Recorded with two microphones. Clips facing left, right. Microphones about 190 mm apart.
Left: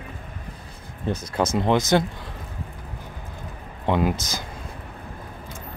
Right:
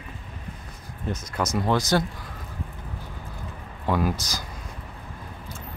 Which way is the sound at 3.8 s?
20° left (ahead or behind).